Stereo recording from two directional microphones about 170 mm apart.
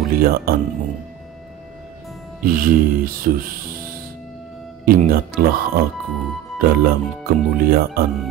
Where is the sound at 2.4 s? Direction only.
55° right (ahead or behind).